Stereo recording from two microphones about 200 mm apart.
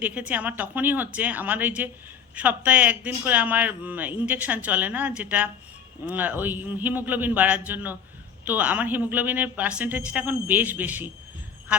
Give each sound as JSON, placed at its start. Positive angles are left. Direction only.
{"t": 0.0, "sound": "a man's voice", "side_deg": -5}